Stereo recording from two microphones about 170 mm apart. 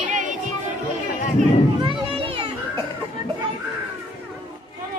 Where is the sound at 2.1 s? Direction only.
35° right (ahead or behind).